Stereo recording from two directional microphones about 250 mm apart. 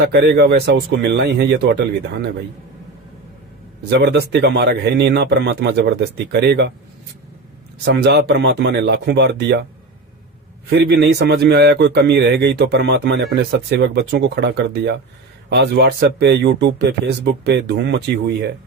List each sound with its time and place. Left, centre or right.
0.1 s speech: right
3.8 s a man's voice: right
7.9 s a man's voice: right
10.7 s a man's voice: right